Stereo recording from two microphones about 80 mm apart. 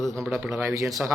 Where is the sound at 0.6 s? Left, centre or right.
Right.